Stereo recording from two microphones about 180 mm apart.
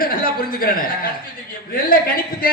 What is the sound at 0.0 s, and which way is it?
A woman's voice, 55° left (ahead or behind).